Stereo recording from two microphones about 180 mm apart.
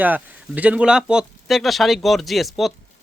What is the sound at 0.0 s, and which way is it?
Speech, 10° right (ahead or behind).